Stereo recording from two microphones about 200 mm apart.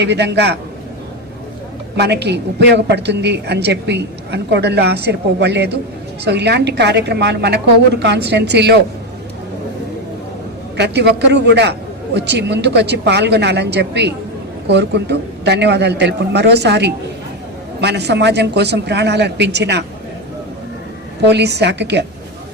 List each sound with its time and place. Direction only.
0.0 s a woman's voice: 60° right (ahead or behind)
2.0 s a woman's voice: 55° right (ahead or behind)
10.8 s a woman's voice: 60° right (ahead or behind)
21.2 s a woman's voice: 55° right (ahead or behind)